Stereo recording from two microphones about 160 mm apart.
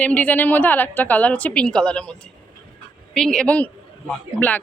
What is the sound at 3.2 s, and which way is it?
A woman's voice, 5° left (ahead or behind).